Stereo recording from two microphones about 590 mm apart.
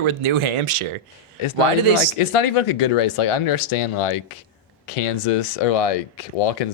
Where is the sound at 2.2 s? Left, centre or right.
Left.